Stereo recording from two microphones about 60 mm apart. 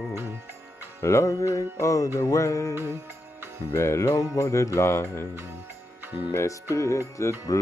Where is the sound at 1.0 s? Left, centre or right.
Left.